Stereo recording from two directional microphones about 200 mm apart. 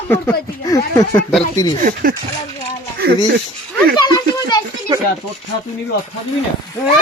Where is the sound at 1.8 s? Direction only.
45° right (ahead or behind).